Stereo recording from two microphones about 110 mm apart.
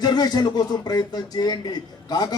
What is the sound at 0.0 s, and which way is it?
A man's voice, 40° left (ahead or behind).